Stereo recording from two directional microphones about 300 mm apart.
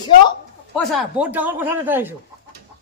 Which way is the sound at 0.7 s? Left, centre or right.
Centre.